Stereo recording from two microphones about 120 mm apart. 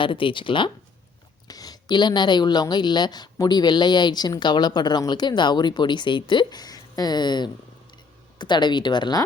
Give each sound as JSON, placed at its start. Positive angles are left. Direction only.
{"t": 0.0, "sound": "speech", "side_deg": 45}
{"t": 1.5, "sound": "speech", "side_deg": 30}